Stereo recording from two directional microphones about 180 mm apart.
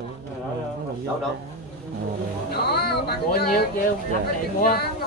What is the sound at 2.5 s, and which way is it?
Music, 65° left (ahead or behind).